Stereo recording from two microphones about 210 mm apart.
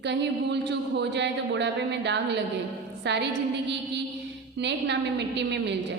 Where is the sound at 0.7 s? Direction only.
55° right (ahead or behind).